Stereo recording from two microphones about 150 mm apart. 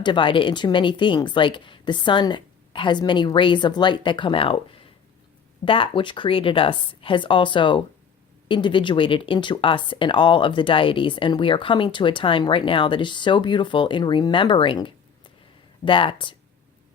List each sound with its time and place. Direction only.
0.0 s speech: 35° left (ahead or behind)